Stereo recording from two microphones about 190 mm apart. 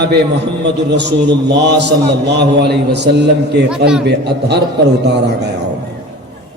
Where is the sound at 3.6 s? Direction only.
5° right (ahead or behind).